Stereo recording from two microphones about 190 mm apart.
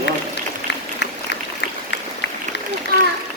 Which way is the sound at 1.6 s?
65° left (ahead or behind).